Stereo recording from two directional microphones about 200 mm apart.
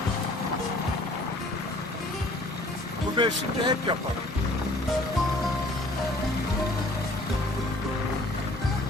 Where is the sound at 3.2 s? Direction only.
25° right (ahead or behind).